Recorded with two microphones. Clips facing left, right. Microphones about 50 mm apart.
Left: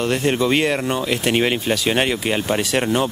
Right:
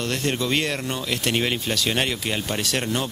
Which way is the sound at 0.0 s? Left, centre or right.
Centre.